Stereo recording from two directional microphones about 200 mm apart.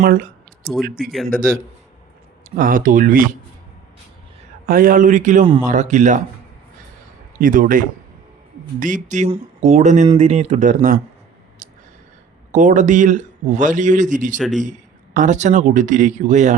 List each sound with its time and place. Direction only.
0.0 s speech: 50° right (ahead or behind)
0.6 s speech: centre (ahead or behind)
2.6 s speech: 45° right (ahead or behind)
4.6 s a man's voice: 45° right (ahead or behind)
7.3 s a man's voice: 45° right (ahead or behind)
12.5 s a man's voice: 40° right (ahead or behind)
14.3 s a man's voice: centre (ahead or behind)
14.6 s a man's voice: 40° right (ahead or behind)